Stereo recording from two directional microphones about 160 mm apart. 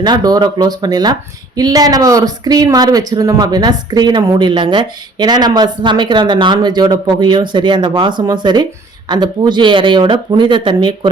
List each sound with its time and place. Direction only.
0.0 s speech: 25° right (ahead or behind)